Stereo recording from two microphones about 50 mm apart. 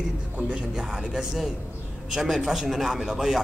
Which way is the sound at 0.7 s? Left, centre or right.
Centre.